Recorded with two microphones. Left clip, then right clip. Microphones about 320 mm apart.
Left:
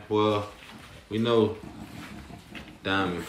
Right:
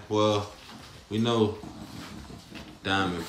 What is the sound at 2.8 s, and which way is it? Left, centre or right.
Speech, centre.